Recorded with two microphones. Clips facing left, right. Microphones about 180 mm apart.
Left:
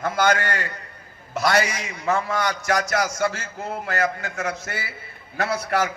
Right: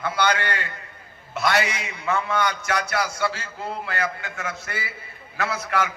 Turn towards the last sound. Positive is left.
turn(degrees=40)  # may be behind; listen again after turning